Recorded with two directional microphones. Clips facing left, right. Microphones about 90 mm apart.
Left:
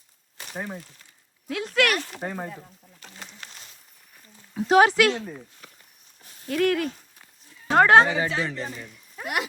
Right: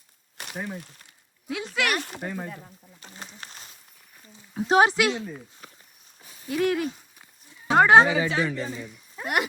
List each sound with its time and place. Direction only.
0.5 s speech: centre (ahead or behind)
2.2 s speech: 15° left (ahead or behind)
3.4 s walk: 35° right (ahead or behind)
4.5 s speech: 25° right (ahead or behind)
5.1 s speech: centre (ahead or behind)
6.5 s speech: 15° right (ahead or behind)
7.7 s speech: 5° right (ahead or behind)
9.2 s speech: 50° right (ahead or behind)